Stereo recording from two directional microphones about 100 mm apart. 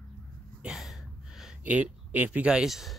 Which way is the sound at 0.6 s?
Centre (ahead or behind).